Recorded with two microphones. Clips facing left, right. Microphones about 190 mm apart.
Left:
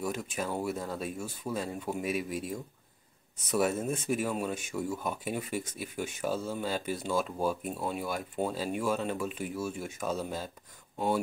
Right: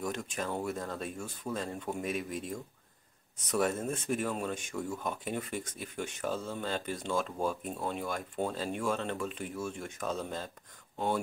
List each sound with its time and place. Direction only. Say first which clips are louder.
0.0 s speech: left 2 dB; 5° left (ahead or behind)